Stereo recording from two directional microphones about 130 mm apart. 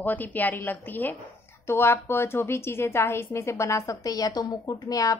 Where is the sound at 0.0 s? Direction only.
15° left (ahead or behind).